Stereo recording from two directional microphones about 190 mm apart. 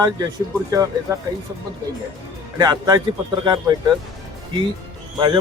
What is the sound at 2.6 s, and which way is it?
A man's voice, 20° right (ahead or behind).